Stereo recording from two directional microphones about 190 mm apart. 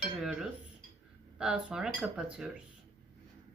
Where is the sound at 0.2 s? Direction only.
Centre (ahead or behind).